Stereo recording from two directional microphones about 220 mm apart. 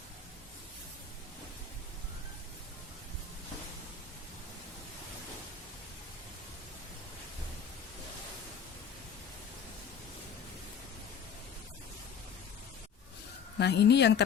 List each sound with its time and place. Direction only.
13.6 s a woman's voice: 50° left (ahead or behind)